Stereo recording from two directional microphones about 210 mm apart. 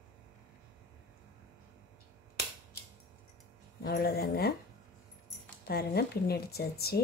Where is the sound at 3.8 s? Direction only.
45° left (ahead or behind).